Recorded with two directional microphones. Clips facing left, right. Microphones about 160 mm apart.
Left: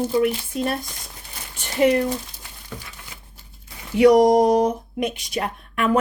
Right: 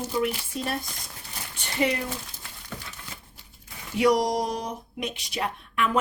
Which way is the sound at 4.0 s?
60° left (ahead or behind).